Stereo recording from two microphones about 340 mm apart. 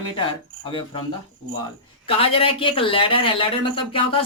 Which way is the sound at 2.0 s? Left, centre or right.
Centre.